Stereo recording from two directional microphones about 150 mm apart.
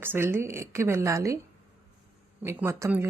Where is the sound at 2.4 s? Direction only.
15° right (ahead or behind).